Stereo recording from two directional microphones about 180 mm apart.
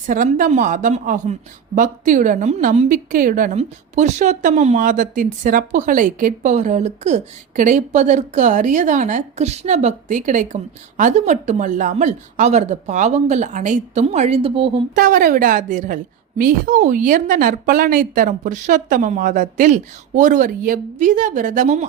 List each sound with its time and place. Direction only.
0.0 s a woman's voice: 45° right (ahead or behind); by 14.8 s 30° right (ahead or behind)
14.9 s a woman's voice: 50° right (ahead or behind)